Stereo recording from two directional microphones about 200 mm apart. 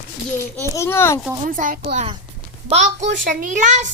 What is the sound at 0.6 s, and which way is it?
Speech, 10° left (ahead or behind).